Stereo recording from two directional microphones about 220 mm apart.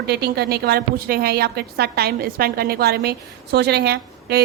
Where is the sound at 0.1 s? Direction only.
45° right (ahead or behind).